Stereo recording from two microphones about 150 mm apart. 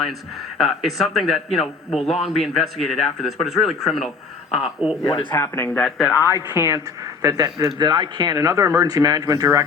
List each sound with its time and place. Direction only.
0.6 s speech: centre (ahead or behind)
5.3 s speech: 15° left (ahead or behind)
5.8 s speech: centre (ahead or behind)
6.2 s speech: 20° right (ahead or behind)